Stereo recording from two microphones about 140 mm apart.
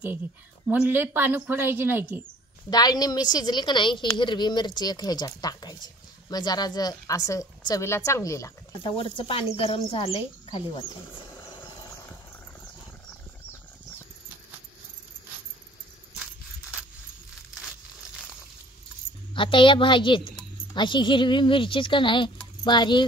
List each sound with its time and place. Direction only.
0.7 s speech: 15° right (ahead or behind)
2.7 s a woman's voice: 30° left (ahead or behind)
8.8 s speech: 40° left (ahead or behind)
19.3 s speech: 35° left (ahead or behind)